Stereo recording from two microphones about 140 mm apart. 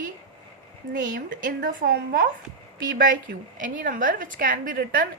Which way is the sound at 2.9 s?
75° right (ahead or behind).